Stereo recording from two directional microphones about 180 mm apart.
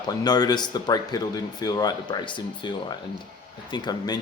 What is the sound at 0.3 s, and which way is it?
Speech, 20° left (ahead or behind).